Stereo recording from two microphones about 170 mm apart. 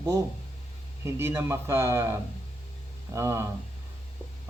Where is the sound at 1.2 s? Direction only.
15° right (ahead or behind).